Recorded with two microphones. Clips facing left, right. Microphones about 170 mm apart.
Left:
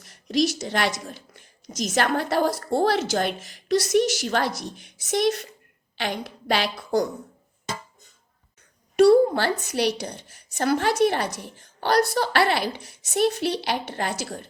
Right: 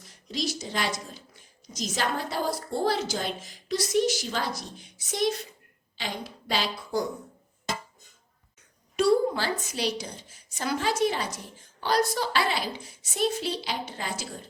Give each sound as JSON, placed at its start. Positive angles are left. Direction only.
{"t": 0.0, "sound": "a woman's voice", "side_deg": 70}
{"t": 9.0, "sound": "a woman's voice", "side_deg": 65}